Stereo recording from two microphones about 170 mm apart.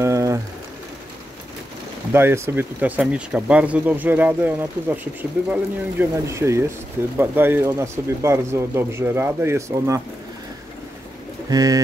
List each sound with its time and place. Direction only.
0.0 s a sound: 15° right (ahead or behind)
2.1 s speech: 15° right (ahead or behind)
11.5 s speech: 20° right (ahead or behind)